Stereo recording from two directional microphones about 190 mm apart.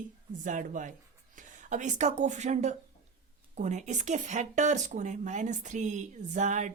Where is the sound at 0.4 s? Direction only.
40° right (ahead or behind).